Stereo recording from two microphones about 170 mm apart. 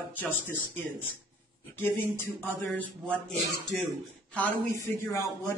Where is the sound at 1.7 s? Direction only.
15° left (ahead or behind).